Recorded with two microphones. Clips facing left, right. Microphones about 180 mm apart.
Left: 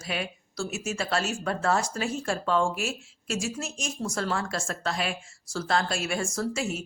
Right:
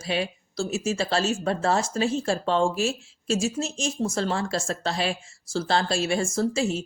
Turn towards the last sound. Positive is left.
turn(degrees=-30)  # may be behind; listen again after turning